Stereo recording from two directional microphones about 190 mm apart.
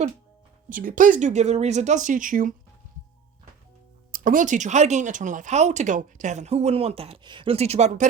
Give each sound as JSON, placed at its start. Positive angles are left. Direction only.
{"t": 0.7, "sound": "speech", "side_deg": -45}
{"t": 4.1, "sound": "speech", "side_deg": -45}